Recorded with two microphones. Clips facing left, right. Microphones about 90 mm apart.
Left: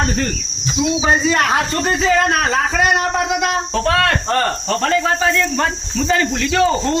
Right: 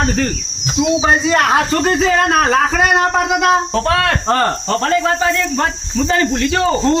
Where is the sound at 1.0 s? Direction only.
40° right (ahead or behind).